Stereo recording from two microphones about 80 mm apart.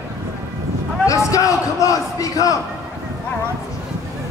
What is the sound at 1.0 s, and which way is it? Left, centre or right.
A man's voice, left.